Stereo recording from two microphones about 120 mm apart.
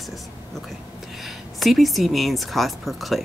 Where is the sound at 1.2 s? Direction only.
Centre (ahead or behind).